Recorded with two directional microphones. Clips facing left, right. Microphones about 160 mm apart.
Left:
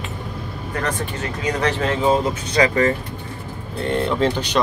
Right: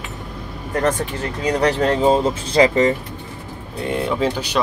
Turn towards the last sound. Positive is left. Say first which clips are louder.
# left 1 dB
turn(degrees=-5)  # may be behind; listen again after turning